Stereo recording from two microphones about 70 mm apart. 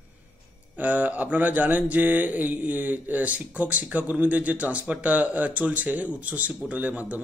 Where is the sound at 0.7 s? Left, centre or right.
Right.